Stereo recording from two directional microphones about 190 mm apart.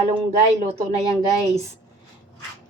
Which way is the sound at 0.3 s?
35° right (ahead or behind).